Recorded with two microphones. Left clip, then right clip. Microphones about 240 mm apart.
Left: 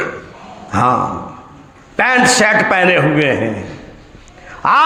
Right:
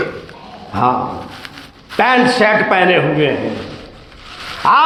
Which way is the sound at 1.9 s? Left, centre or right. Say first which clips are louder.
Left 1 dB; left.